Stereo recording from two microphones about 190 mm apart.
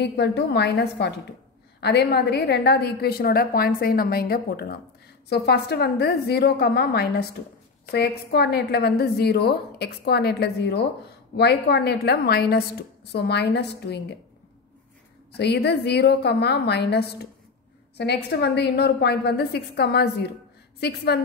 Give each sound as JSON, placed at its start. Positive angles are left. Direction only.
{"t": 0.0, "sound": "a woman's voice", "side_deg": 60}
{"t": 15.3, "sound": "a woman's voice", "side_deg": 60}